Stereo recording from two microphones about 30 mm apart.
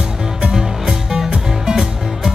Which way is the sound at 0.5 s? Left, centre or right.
Right.